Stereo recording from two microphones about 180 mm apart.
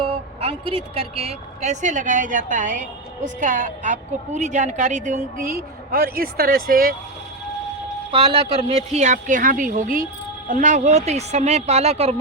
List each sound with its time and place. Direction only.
0.0 s a woman's voice: 30° right (ahead or behind); by 6.9 s 55° right (ahead or behind)
8.1 s a woman's voice: 30° right (ahead or behind)